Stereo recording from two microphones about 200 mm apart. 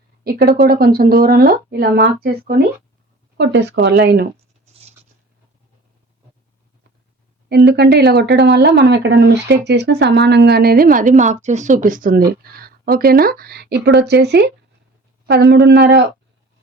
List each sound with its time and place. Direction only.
0.3 s speech: 50° right (ahead or behind)
7.5 s speech: 55° right (ahead or behind)